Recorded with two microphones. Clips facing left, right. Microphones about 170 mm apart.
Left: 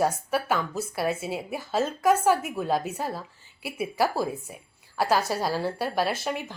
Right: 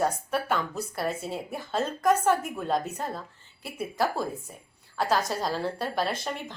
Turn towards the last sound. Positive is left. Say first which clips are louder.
# left 3 dB
turn(degrees=5)  # may be behind; listen again after turning